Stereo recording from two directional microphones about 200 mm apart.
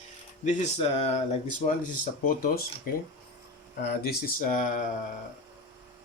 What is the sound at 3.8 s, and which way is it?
Speech, 50° left (ahead or behind).